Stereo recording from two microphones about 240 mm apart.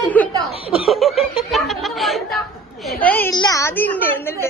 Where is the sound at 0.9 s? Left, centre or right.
Centre.